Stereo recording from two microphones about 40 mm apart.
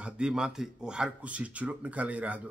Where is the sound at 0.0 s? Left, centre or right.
Centre.